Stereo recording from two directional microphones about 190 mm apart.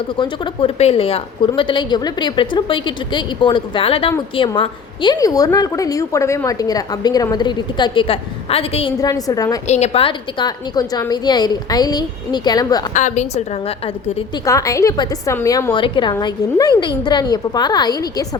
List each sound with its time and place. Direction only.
0.2 s a woman's voice: 30° left (ahead or behind)
9.0 s a woman's voice: 20° left (ahead or behind)
9.6 s a woman's voice: 35° left (ahead or behind)
12.9 s a woman's voice: 40° left (ahead or behind)
14.4 s a woman's voice: 15° left (ahead or behind)